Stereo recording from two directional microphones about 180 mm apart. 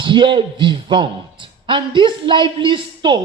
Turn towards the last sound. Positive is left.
turn(degrees=-25)  # may be behind; listen again after turning